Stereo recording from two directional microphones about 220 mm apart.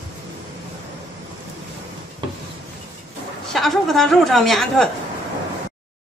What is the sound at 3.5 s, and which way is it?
Speech, centre (ahead or behind).